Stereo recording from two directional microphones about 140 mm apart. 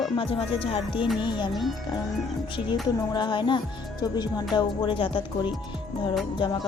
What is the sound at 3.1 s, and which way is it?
A woman's voice, 35° left (ahead or behind).